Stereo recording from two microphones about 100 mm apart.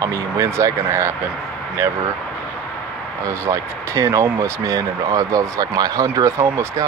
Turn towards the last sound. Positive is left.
turn(degrees=-30)  # may be behind; listen again after turning